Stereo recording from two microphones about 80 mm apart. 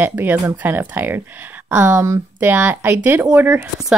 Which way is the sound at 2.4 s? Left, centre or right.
Right.